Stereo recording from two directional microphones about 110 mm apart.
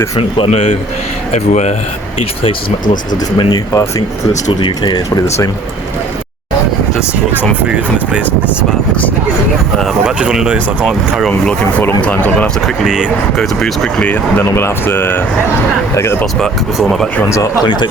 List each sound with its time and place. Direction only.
0.2 s speech: 60° left (ahead or behind)
1.3 s speech: 90° left
3.3 s speech: 35° left (ahead or behind)
4.6 s speech: 45° left (ahead or behind)
7.7 s speech: 10° right (ahead or behind)
9.7 s speech: centre (ahead or behind)
11.3 s speech: 15° left (ahead or behind)
12.6 s speech: 5° right (ahead or behind); by 15.2 s 20° left (ahead or behind)
16.2 s speech: centre (ahead or behind)
17.2 s speech: 25° left (ahead or behind)